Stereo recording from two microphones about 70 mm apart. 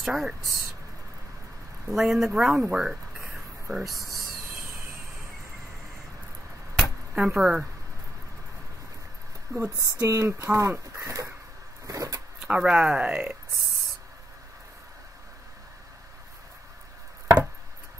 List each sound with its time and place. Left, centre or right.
0.0 s speech: centre
1.9 s speech: centre
7.2 s speech: centre
9.8 s speech: right
11.0 s a sound: right
11.8 s vehicle: right
12.4 s speech: centre